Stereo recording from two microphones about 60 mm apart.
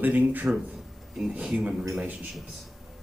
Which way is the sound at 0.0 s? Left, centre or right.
Right.